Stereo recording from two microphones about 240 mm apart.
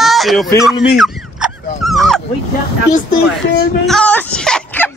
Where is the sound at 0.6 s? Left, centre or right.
Centre.